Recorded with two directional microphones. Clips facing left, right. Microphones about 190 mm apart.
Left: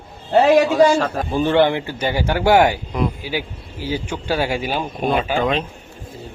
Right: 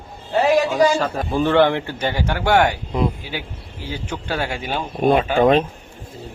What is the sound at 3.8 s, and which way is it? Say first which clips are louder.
A man's voice: left 4 dB; 10° left (ahead or behind).